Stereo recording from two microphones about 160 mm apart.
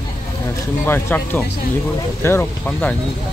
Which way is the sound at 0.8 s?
15° left (ahead or behind).